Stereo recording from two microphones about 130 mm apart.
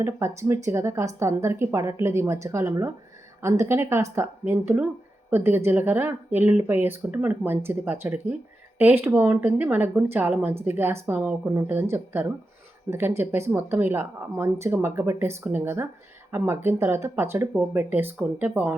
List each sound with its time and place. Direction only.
0.0 s a woman's voice: 20° right (ahead or behind)